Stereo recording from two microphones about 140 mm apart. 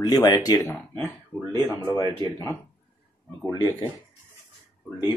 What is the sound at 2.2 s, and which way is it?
Speech, 20° left (ahead or behind).